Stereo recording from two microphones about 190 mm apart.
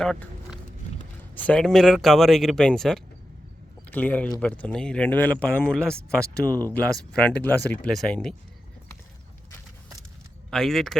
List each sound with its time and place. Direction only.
0.0 s a sound: centre (ahead or behind)
1.4 s speech: 5° left (ahead or behind)
10.5 s speech: centre (ahead or behind)